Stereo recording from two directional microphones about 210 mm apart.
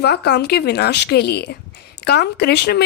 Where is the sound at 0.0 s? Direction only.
50° left (ahead or behind).